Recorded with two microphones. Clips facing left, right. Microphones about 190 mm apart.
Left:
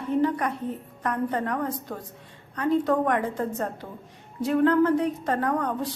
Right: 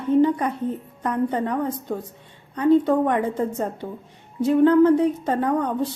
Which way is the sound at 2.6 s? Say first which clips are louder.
Right 6 dB; 20° right (ahead or behind).